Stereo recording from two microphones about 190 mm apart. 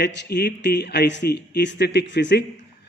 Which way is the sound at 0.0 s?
60° left (ahead or behind).